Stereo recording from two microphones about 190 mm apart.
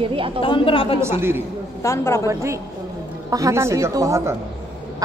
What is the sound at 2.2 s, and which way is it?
A woman's voice, 15° right (ahead or behind).